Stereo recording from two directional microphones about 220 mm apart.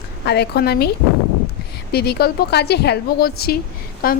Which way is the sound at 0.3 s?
45° left (ahead or behind).